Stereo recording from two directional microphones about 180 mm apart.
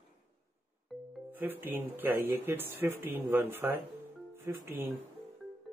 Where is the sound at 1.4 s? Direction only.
10° right (ahead or behind).